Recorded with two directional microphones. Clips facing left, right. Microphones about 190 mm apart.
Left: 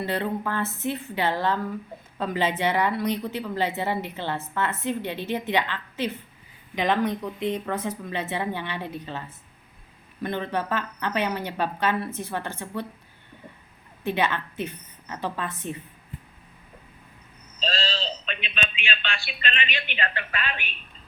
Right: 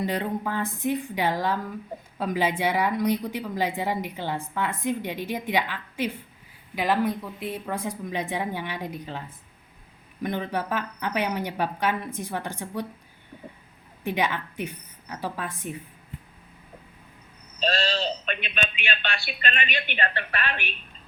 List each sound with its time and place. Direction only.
0.0 s a woman's voice: 15° right (ahead or behind)
14.0 s a woman's voice: 15° right (ahead or behind)
17.6 s a woman's voice: 65° right (ahead or behind); by 20.1 s 45° right (ahead or behind)